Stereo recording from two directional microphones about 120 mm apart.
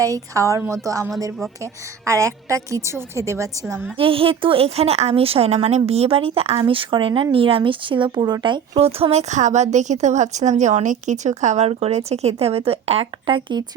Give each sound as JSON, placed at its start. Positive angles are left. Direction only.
{"t": 0.0, "sound": "a woman's voice", "side_deg": -25}
{"t": 2.0, "sound": "a woman's voice", "side_deg": -25}
{"t": 3.9, "sound": "speech", "side_deg": -50}